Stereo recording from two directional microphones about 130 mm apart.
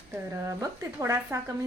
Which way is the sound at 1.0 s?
25° right (ahead or behind).